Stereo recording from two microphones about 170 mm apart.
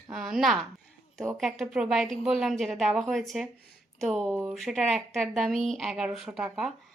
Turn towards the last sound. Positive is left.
turn(degrees=0)  # may be behind; listen again after turning